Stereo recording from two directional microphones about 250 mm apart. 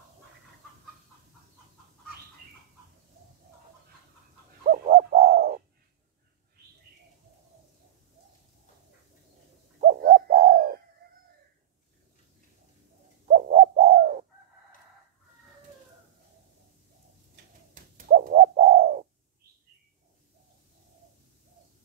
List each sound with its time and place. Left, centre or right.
4.6 s bird: right
9.8 s bird: right
13.3 s bird: right
17.9 s bird: right